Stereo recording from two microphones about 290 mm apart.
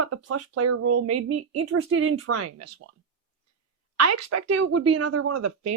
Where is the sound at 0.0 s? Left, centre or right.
Right.